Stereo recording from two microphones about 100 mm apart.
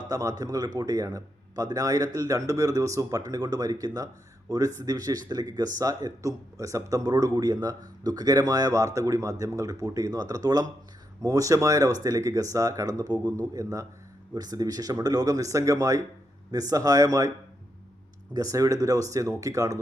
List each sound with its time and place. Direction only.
0.1 s speech: 35° right (ahead or behind)
18.3 s speech: 35° right (ahead or behind)